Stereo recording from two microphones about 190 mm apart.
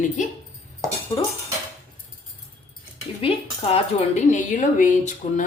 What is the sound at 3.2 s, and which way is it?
Speech, 30° left (ahead or behind).